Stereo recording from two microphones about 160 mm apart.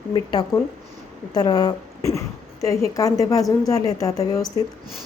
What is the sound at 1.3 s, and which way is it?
A woman's voice, 25° left (ahead or behind).